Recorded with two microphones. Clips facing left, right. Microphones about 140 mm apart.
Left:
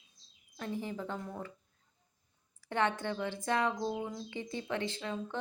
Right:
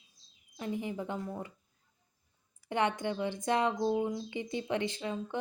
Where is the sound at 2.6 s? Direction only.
15° right (ahead or behind).